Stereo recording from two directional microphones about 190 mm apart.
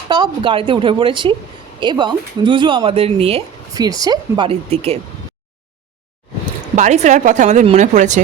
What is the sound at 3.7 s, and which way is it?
Speech, 20° right (ahead or behind).